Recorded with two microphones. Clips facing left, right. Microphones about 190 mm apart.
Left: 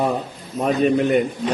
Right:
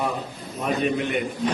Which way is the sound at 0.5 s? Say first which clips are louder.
Left 6 dB; 40° left (ahead or behind).